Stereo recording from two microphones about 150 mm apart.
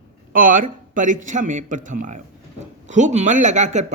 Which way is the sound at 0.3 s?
65° right (ahead or behind).